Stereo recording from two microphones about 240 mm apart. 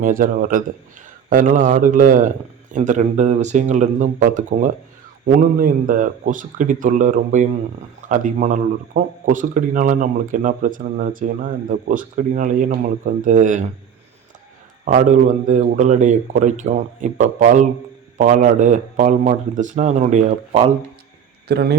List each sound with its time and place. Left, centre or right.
0.0 s speech: right
14.8 s speech: right
21.4 s speech: right